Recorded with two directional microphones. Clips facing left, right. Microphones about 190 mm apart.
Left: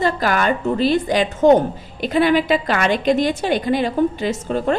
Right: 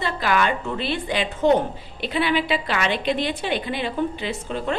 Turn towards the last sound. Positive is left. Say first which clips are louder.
# left 6 dB
turn(degrees=45)  # may be behind; listen again after turning